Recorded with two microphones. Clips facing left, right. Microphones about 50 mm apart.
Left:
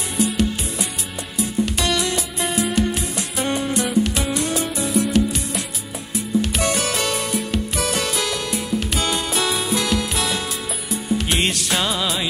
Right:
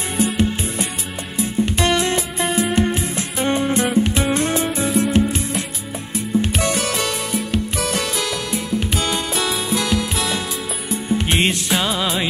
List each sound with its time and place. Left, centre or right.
1.4 s music: right
6.8 s music: centre
11.2 s music: right
11.7 s music: centre